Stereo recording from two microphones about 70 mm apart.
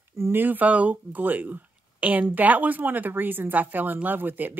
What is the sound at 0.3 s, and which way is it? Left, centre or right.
Speech, right.